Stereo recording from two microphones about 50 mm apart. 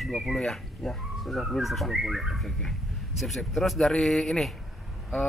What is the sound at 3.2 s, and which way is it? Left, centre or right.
Speech, centre.